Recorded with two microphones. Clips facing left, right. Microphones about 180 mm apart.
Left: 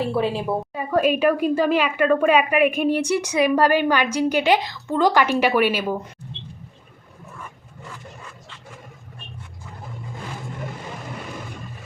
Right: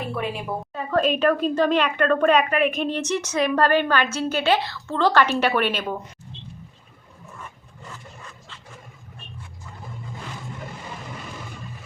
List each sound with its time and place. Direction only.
0.0 s a woman's voice: 30° left (ahead or behind)
0.7 s speech: 10° left (ahead or behind)